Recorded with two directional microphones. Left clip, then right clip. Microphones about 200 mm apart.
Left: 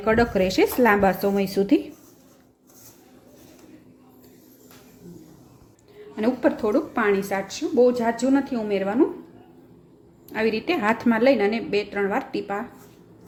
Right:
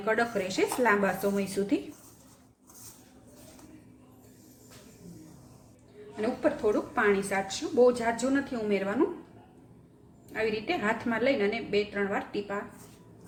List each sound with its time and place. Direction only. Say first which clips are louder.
0.0 s speech: left 8 dB; 40° left (ahead or behind)
6.1 s speech: left 6 dB; 45° left (ahead or behind); by 9.0 s 25° left (ahead or behind)
10.3 s a woman's voice: left 6 dB; 45° left (ahead or behind)